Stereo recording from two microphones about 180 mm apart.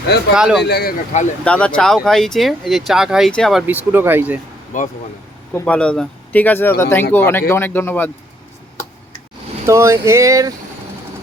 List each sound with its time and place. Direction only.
0.3 s speech: 5° right (ahead or behind)
0.6 s speech: 65° left (ahead or behind)
1.5 s speech: 5° left (ahead or behind)
3.7 s a sound: 10° right (ahead or behind)
4.7 s speech: 45° left (ahead or behind)
5.5 s speech: 5° left (ahead or behind)
9.6 s a sound: 15° right (ahead or behind)